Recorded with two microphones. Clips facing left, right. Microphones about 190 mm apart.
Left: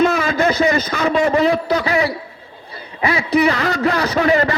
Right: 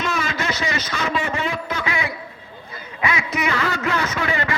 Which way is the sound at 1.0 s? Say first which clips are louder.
Left 10 dB; 35° left (ahead or behind).